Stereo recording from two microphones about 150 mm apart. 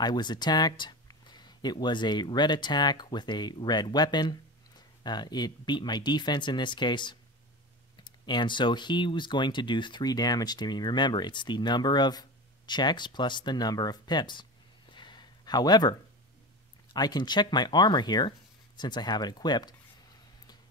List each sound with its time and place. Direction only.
0.0 s speech: 30° left (ahead or behind)